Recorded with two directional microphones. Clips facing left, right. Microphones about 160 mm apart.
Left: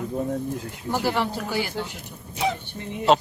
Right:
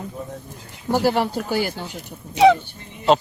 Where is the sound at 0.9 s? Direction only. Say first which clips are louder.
Right 5 dB; 40° right (ahead or behind).